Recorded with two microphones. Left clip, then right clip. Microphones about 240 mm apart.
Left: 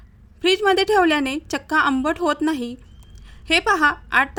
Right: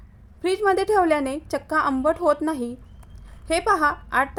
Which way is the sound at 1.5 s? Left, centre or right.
Left.